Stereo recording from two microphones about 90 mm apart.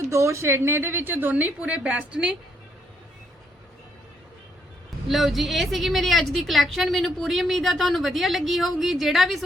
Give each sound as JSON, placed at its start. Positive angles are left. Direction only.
{"t": 0.0, "sound": "a woman's voice", "side_deg": -35}
{"t": 5.0, "sound": "a woman's voice", "side_deg": 0}